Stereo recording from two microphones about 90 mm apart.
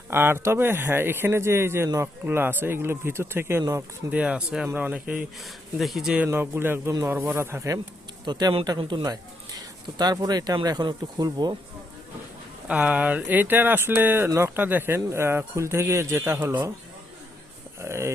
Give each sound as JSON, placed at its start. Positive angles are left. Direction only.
{"t": 0.1, "sound": "speech", "side_deg": -25}
{"t": 4.1, "sound": "speech", "side_deg": -10}
{"t": 5.8, "sound": "speech", "side_deg": -5}
{"t": 6.2, "sound": "speech", "side_deg": -25}
{"t": 8.2, "sound": "speech", "side_deg": -55}
{"t": 12.6, "sound": "speech", "side_deg": -15}
{"t": 17.7, "sound": "speech", "side_deg": -30}